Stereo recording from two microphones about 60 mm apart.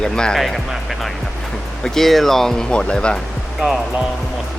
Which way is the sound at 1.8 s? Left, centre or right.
Centre.